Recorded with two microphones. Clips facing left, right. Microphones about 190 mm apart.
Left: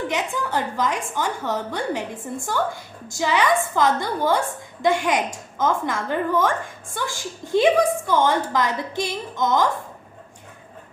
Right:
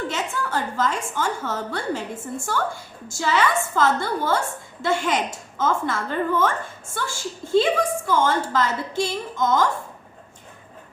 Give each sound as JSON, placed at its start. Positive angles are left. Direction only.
{"t": 0.1, "sound": "a woman's voice", "side_deg": 15}